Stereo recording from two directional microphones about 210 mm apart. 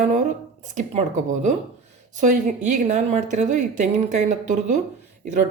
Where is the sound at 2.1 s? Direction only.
35° right (ahead or behind).